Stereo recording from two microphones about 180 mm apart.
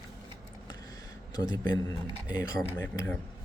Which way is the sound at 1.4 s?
25° left (ahead or behind).